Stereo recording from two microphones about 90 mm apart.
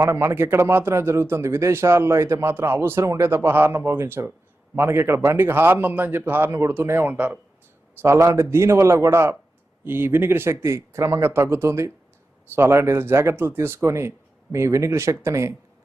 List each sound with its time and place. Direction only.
0.0 s speech: 30° right (ahead or behind)
8.0 s speech: 30° right (ahead or behind)